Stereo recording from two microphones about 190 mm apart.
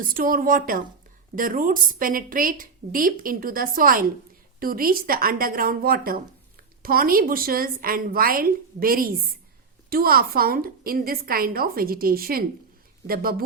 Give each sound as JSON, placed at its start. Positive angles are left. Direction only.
{"t": 0.0, "sound": "speech", "side_deg": -45}